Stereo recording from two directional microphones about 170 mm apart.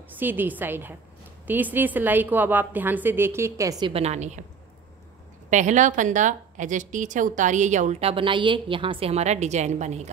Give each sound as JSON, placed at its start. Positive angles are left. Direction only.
{"t": 0.2, "sound": "a woman's voice", "side_deg": -10}
{"t": 3.8, "sound": "a woman's voice", "side_deg": -35}
{"t": 5.5, "sound": "a woman's voice", "side_deg": -45}